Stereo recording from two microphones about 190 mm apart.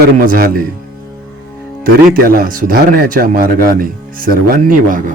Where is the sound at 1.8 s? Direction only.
50° right (ahead or behind).